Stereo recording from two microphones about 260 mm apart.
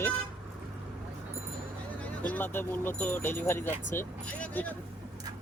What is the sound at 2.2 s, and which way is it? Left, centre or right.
Speech, centre.